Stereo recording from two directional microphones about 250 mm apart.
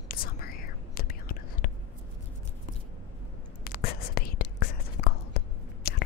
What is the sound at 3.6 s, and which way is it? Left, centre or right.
Whispering, left.